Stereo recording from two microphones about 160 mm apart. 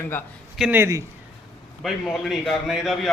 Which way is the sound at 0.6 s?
10° right (ahead or behind).